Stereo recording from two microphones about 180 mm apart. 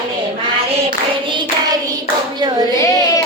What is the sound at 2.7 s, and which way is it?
Child singing, 20° left (ahead or behind).